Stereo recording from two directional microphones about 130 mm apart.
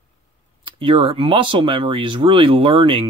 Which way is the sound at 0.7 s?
45° right (ahead or behind).